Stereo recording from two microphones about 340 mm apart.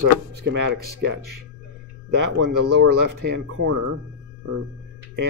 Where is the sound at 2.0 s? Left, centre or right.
Right.